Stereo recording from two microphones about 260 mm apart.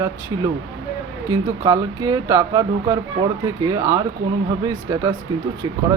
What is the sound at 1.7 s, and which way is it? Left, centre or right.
Speech, centre.